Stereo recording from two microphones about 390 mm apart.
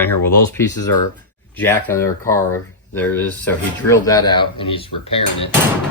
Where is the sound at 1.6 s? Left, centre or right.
Centre.